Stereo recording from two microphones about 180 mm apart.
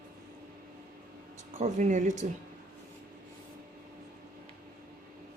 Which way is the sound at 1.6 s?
45° right (ahead or behind).